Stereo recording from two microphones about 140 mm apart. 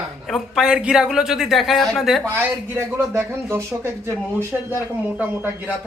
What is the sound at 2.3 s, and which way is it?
Speech, 20° right (ahead or behind).